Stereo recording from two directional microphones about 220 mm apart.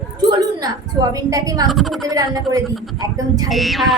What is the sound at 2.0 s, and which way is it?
Speech, 15° right (ahead or behind).